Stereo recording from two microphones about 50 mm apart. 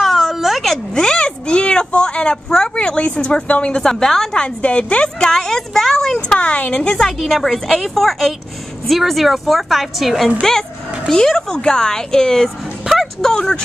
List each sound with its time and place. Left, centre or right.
0.0 s a sound: centre
0.9 s a sound: centre
3.9 s a woman's voice: centre
4.3 s a woman's voice: left
6.2 s a woman's voice: left
7.2 s a woman's voice: centre
11.1 s a woman's voice: centre
12.8 s music: centre
13.2 s a woman's voice: centre